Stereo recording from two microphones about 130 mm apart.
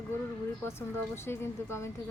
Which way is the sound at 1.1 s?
20° left (ahead or behind).